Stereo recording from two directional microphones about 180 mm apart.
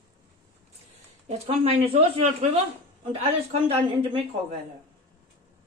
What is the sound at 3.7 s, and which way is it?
Speech, 30° right (ahead or behind).